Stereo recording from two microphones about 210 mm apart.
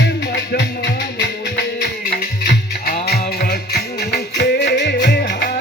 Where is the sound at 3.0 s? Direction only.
50° left (ahead or behind).